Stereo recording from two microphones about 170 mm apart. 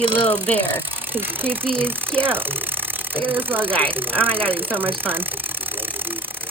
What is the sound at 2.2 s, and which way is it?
Speech, 10° right (ahead or behind).